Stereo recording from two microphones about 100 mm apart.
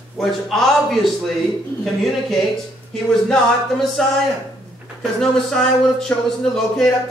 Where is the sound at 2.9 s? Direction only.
5° left (ahead or behind).